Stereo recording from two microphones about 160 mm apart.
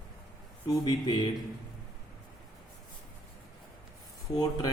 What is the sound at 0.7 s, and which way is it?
Speech, 25° left (ahead or behind).